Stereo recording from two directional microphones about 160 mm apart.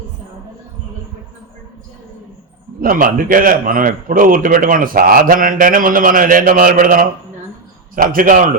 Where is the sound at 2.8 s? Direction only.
60° right (ahead or behind).